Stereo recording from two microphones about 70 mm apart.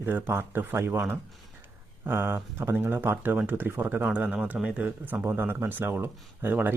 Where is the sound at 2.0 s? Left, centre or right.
Right.